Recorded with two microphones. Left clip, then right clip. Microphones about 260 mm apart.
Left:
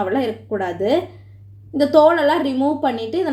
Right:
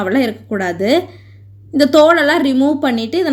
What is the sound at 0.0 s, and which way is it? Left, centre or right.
A woman's voice, right.